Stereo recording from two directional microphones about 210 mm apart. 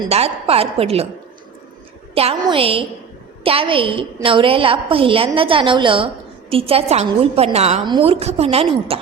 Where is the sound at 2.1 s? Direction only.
25° right (ahead or behind).